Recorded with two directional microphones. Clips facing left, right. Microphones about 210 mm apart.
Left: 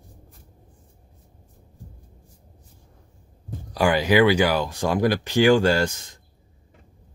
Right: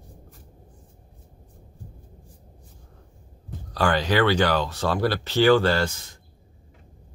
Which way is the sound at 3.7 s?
10° left (ahead or behind).